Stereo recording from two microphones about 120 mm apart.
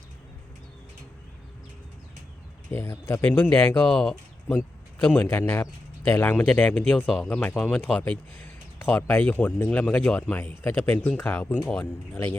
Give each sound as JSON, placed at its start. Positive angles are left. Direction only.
{"t": 2.6, "sound": "speech", "side_deg": 20}